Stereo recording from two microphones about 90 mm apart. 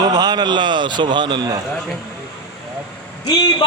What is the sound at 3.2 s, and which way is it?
Speech, 50° left (ahead or behind).